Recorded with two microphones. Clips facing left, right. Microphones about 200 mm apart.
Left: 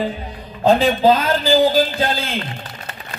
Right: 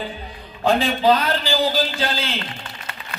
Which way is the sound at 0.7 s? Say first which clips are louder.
Left 4 dB; 45° left (ahead or behind).